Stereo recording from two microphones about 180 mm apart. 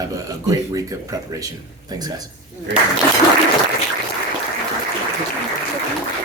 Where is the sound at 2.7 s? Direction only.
75° right (ahead or behind).